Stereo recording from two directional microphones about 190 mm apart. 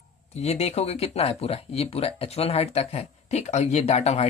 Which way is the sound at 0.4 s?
35° left (ahead or behind).